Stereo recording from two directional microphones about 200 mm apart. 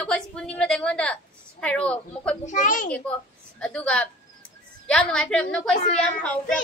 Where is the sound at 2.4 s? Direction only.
40° left (ahead or behind).